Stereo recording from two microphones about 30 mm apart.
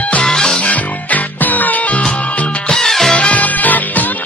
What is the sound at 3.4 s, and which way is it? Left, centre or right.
Music, left.